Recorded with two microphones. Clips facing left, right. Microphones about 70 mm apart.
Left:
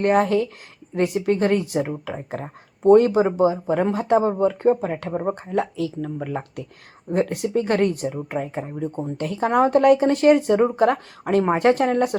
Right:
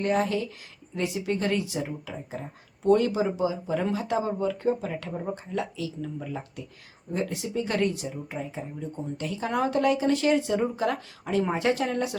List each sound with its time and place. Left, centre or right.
0.0 s speech: left
2.8 s speech: left